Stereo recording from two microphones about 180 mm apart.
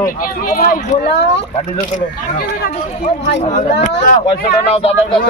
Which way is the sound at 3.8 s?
45° left (ahead or behind).